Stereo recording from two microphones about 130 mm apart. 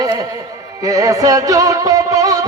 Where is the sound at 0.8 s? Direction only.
25° right (ahead or behind).